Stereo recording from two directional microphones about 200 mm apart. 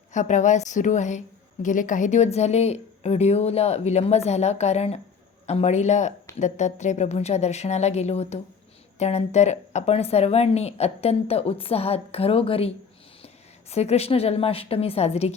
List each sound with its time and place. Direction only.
0.1 s a woman's voice: 40° left (ahead or behind)